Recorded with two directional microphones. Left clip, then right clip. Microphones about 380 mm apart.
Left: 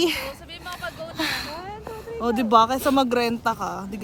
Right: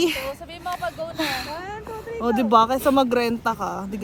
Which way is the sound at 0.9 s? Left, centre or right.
Centre.